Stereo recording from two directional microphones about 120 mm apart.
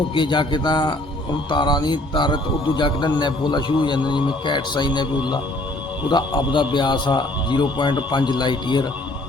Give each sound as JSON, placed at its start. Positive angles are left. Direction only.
{"t": 0.1, "sound": "a man's voice", "side_deg": 40}
{"t": 6.1, "sound": "a man's voice", "side_deg": 40}